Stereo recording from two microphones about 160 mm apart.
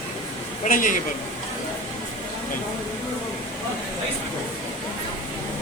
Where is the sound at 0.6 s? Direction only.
55° left (ahead or behind).